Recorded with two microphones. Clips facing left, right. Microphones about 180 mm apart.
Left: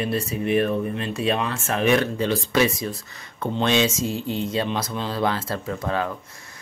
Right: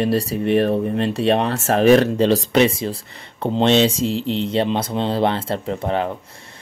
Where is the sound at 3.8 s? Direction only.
70° right (ahead or behind).